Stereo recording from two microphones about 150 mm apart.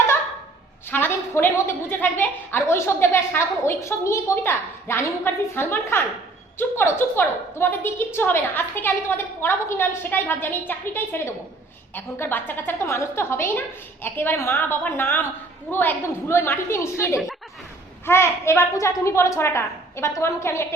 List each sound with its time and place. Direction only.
0.9 s a woman's voice: 15° left (ahead or behind)